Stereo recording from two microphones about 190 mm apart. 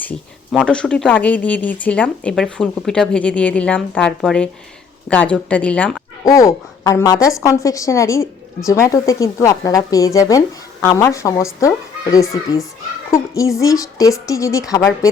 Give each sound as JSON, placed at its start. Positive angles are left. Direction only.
{"t": 0.0, "sound": "a woman's voice", "side_deg": 5}